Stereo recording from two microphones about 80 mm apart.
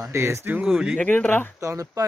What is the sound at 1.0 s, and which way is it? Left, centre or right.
Speech, centre.